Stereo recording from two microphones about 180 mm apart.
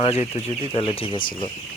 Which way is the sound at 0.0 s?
35° left (ahead or behind).